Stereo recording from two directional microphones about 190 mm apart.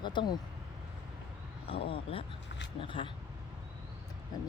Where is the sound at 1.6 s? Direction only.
30° left (ahead or behind).